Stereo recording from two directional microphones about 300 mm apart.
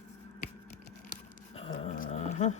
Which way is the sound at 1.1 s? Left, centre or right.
Centre.